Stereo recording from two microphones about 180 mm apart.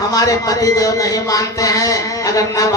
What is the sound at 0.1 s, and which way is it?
Speech, 20° left (ahead or behind).